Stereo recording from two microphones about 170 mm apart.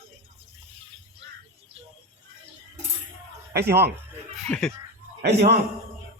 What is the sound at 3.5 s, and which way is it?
Speech, 75° right (ahead or behind).